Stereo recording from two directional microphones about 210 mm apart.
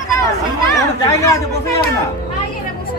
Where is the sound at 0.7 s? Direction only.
15° left (ahead or behind).